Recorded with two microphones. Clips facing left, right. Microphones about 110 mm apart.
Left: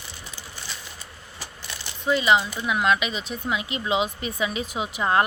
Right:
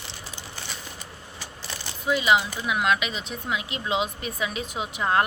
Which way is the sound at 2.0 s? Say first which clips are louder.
Left 1 dB; 5° right (ahead or behind).